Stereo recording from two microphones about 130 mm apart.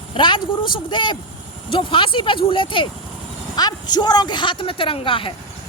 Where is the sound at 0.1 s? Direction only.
40° left (ahead or behind).